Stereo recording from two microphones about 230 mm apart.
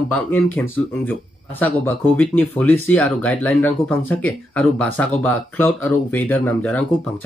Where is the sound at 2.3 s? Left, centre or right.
Centre.